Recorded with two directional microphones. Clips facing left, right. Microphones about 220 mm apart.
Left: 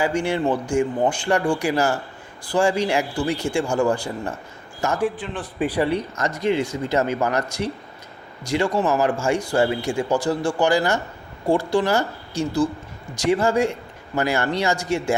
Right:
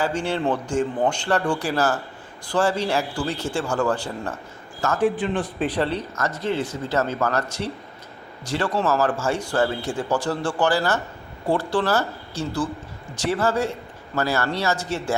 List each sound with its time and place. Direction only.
0.0 s speech: 10° left (ahead or behind)